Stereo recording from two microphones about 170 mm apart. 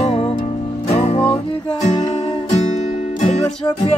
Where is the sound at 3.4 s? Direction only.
25° left (ahead or behind).